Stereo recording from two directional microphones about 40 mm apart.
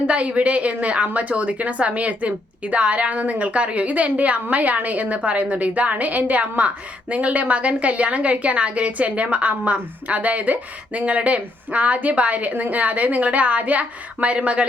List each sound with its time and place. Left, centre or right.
0.1 s a woman's voice: right